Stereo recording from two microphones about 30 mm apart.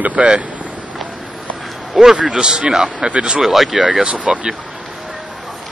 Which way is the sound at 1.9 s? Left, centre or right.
Centre.